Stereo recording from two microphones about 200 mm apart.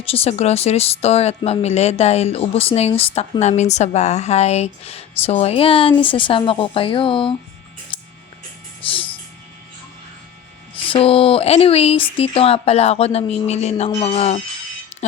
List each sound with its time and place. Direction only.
0.0 s speech: 30° left (ahead or behind)
7.9 s a sound: 25° left (ahead or behind)
10.8 s speech: 25° left (ahead or behind)